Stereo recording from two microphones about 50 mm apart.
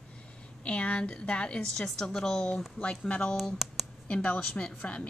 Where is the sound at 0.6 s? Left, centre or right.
Left.